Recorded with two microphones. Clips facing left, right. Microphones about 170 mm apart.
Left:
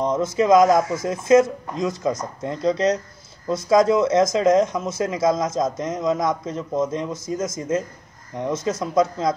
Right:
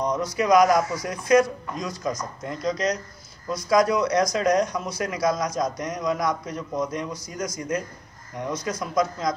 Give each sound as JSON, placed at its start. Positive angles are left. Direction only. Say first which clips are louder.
{"t": 0.0, "sound": "speech", "louder": "left 4 dB", "side_deg": 25}